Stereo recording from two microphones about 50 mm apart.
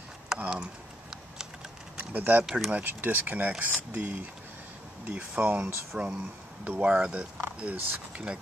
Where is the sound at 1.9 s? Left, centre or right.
Right.